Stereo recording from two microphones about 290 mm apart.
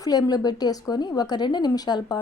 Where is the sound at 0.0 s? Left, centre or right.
Centre.